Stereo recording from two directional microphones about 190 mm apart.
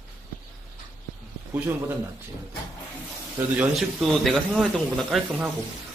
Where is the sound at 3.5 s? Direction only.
Centre (ahead or behind).